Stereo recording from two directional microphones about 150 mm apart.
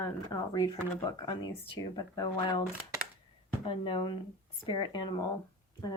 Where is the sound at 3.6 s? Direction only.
35° left (ahead or behind).